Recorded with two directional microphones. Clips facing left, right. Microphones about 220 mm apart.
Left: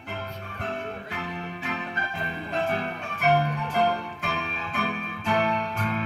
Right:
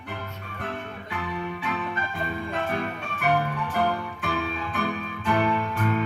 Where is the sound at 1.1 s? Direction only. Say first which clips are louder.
Right 2 dB; 45° left (ahead or behind).